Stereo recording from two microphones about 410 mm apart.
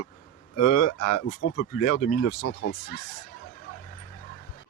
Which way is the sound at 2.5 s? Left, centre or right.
Left.